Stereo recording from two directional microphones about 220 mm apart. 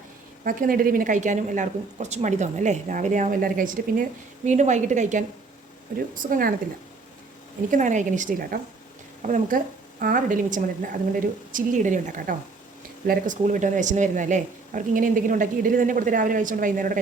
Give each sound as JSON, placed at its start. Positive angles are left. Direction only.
{"t": 0.4, "sound": "a woman's voice", "side_deg": -40}
{"t": 7.7, "sound": "a woman's voice", "side_deg": -35}